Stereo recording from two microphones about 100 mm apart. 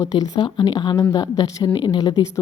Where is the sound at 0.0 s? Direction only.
45° left (ahead or behind).